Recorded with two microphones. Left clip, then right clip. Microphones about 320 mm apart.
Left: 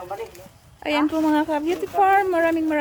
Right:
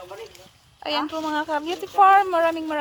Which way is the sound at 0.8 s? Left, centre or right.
Centre.